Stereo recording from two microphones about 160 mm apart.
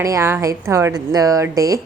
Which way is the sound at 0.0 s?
20° right (ahead or behind).